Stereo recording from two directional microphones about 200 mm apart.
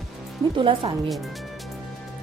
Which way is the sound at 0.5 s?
25° right (ahead or behind).